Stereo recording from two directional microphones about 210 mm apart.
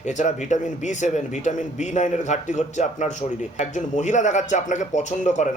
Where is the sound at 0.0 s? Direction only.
35° left (ahead or behind).